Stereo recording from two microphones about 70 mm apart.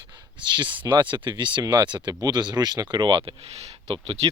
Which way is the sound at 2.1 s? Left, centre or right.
Right.